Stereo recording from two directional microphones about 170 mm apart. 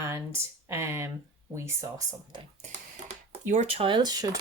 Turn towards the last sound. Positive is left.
turn(degrees=-25)  # may be behind; listen again after turning